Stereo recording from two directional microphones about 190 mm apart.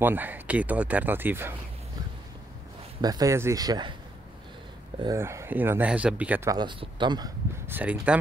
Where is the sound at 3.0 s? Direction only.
20° right (ahead or behind).